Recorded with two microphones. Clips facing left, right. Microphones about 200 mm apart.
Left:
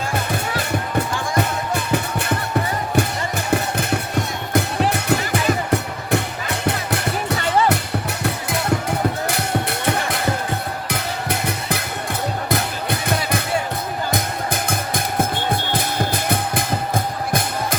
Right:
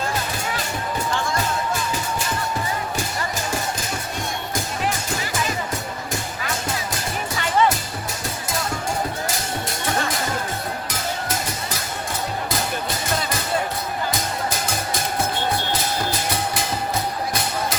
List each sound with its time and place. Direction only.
0.5 s music: 60° left (ahead or behind)